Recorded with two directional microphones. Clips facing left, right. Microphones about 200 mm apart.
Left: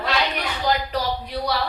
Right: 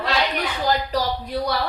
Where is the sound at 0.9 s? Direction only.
50° right (ahead or behind).